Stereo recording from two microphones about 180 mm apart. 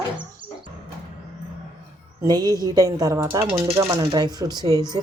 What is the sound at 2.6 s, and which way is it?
Speech, 20° right (ahead or behind).